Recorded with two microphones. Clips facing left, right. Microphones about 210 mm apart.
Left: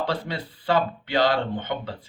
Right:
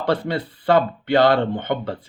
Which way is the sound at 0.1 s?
60° right (ahead or behind).